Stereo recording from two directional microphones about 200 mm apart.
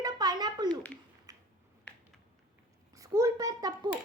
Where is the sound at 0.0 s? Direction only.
20° right (ahead or behind).